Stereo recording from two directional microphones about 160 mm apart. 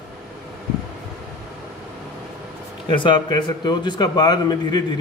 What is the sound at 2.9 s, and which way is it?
Speech, 30° left (ahead or behind).